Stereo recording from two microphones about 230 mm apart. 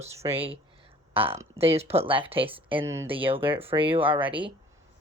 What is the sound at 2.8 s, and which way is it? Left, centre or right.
Speech, centre.